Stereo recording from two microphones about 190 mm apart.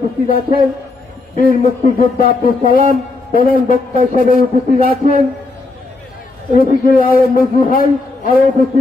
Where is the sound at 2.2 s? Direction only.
50° left (ahead or behind).